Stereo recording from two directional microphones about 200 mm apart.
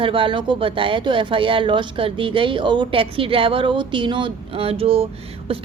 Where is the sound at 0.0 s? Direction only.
25° right (ahead or behind).